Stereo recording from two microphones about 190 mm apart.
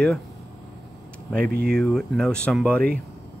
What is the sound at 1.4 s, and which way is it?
Speech, 55° right (ahead or behind).